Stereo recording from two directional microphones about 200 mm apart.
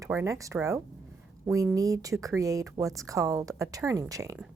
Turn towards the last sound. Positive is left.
turn(degrees=-15)  # may be behind; listen again after turning